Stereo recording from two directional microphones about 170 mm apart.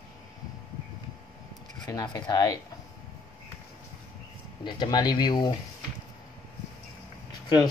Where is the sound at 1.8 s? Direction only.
25° left (ahead or behind).